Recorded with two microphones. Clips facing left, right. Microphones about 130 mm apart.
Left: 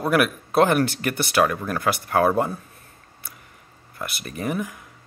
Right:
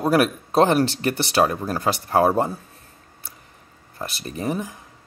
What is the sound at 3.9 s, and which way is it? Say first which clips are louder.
Speech: right 1 dB; 30° right (ahead or behind).